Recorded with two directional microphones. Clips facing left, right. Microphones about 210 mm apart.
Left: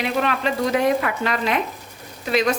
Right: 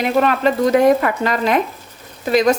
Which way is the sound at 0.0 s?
45° right (ahead or behind).